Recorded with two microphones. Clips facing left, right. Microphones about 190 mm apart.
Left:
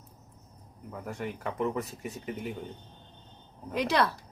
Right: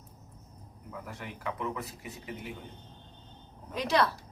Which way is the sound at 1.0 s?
45° left (ahead or behind).